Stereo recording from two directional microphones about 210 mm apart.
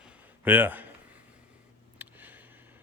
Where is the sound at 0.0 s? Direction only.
10° right (ahead or behind).